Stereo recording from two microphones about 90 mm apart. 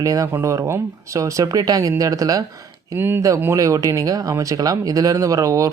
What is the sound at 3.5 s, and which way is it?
Speech, 40° right (ahead or behind).